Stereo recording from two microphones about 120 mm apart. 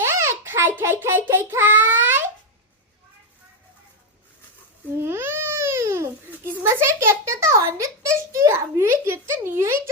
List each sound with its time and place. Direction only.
0.0 s child singing: 20° right (ahead or behind)
4.9 s babbling: 20° right (ahead or behind)
6.6 s a sound: 20° right (ahead or behind)